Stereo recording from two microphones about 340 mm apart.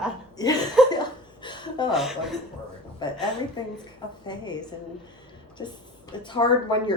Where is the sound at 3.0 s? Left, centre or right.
Centre.